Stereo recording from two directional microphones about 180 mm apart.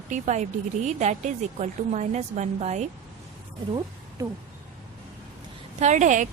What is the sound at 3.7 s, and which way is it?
Speech, 25° right (ahead or behind).